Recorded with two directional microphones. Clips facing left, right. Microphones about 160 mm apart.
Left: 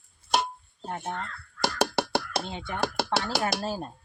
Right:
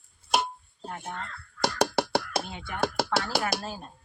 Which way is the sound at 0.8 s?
30° left (ahead or behind).